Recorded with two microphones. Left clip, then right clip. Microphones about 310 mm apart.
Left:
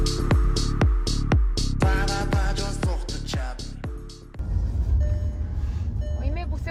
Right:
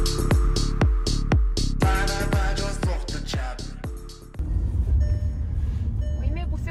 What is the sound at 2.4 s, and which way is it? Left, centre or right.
Music, centre.